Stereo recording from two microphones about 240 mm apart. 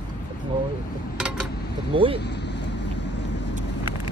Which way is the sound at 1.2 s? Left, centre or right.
Centre.